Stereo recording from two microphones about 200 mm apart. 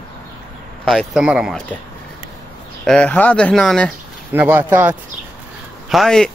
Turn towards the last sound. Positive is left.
turn(degrees=0)  # may be behind; listen again after turning